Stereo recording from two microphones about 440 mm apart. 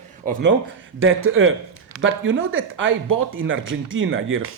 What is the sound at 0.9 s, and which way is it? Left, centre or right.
Speech, right.